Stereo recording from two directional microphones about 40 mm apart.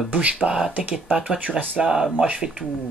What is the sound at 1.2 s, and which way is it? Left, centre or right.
Speech, right.